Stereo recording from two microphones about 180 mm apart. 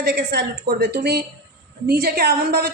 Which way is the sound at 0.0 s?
60° right (ahead or behind).